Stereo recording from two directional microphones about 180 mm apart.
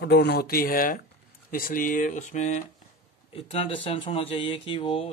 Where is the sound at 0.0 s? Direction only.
70° left (ahead or behind); by 2.6 s 40° left (ahead or behind).